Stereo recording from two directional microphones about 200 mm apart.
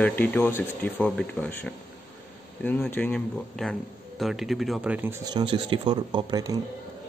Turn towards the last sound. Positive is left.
turn(degrees=-20)  # may be behind; listen again after turning